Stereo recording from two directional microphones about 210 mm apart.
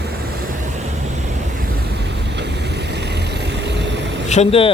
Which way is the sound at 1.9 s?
50° right (ahead or behind).